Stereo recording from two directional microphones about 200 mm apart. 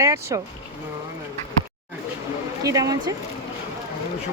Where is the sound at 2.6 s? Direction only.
15° right (ahead or behind).